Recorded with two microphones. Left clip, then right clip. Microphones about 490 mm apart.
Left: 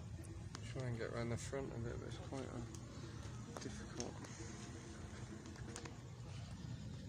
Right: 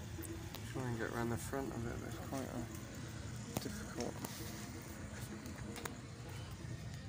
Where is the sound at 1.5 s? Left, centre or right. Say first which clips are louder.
Right 3 dB; left.